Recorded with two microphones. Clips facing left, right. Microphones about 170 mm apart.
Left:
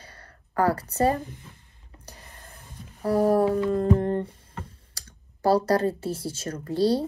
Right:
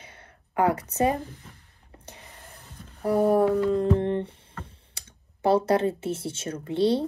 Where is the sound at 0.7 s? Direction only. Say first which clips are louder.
Even; 35° left (ahead or behind).